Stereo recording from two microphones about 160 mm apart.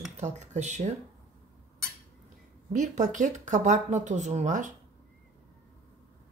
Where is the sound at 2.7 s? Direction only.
50° right (ahead or behind).